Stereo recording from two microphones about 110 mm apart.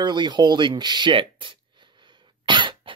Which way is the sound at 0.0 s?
45° right (ahead or behind).